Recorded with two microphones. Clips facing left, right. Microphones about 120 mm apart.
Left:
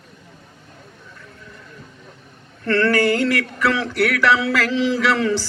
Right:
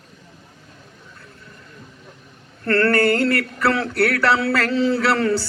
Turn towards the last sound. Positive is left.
turn(degrees=-35)  # may be behind; listen again after turning